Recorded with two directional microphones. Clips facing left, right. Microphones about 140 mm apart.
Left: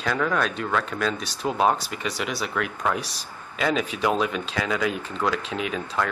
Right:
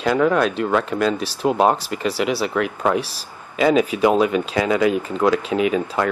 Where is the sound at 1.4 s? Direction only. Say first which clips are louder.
Right 7 dB; 55° right (ahead or behind).